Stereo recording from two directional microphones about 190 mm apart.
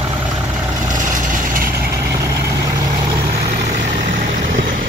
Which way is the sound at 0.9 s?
45° right (ahead or behind).